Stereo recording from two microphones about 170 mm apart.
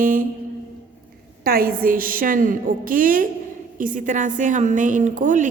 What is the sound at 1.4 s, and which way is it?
A woman's voice, 60° right (ahead or behind).